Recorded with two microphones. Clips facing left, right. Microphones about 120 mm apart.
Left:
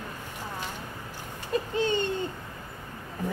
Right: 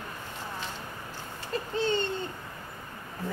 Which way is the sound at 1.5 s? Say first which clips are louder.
Left 2 dB; 15° left (ahead or behind).